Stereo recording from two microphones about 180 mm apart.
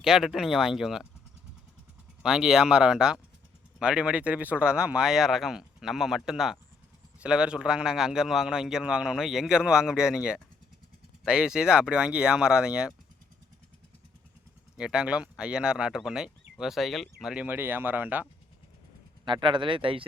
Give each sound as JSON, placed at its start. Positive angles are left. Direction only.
{"t": 0.0, "sound": "speech", "side_deg": 0}
{"t": 2.2, "sound": "speech", "side_deg": -5}
{"t": 14.8, "sound": "speech", "side_deg": -5}
{"t": 19.2, "sound": "speech", "side_deg": -25}